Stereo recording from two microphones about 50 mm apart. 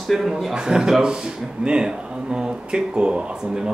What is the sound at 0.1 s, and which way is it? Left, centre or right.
Speech, centre.